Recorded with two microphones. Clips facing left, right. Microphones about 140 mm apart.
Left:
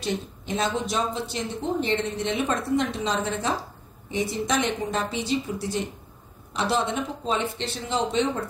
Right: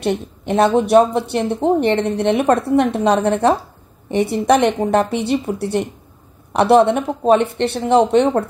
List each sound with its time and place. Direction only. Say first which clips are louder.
0.0 s a woman's voice: right 9 dB; 60° right (ahead or behind)